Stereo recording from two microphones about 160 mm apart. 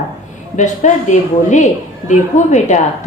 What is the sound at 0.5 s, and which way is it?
A woman's voice, 50° left (ahead or behind).